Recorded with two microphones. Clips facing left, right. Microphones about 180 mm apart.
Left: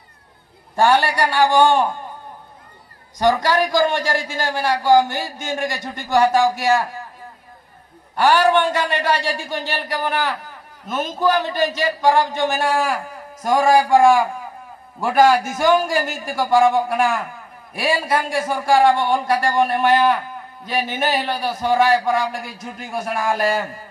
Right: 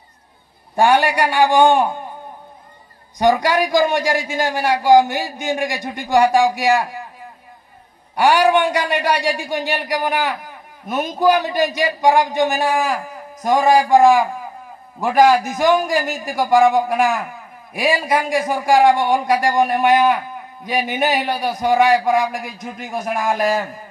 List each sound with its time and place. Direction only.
0.7 s a man's voice: 15° right (ahead or behind)
3.2 s a man's voice: 15° right (ahead or behind)
8.2 s a man's voice: 10° right (ahead or behind)